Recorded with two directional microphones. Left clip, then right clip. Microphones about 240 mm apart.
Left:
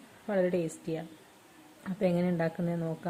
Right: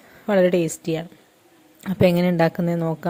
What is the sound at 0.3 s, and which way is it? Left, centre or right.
Speech, right.